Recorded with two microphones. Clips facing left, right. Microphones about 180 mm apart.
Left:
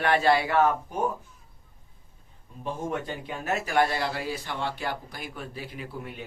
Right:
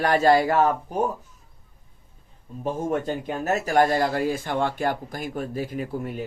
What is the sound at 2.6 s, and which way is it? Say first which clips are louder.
Speech: right 6 dB; 45° right (ahead or behind).